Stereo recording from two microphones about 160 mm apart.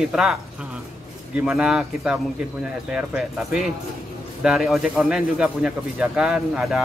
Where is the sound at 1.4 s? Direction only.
5° right (ahead or behind).